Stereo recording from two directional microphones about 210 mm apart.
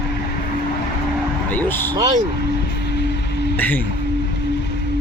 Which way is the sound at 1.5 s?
10° left (ahead or behind).